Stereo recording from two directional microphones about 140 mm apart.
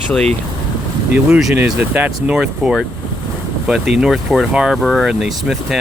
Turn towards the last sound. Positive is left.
turn(degrees=0)  # may be behind; listen again after turning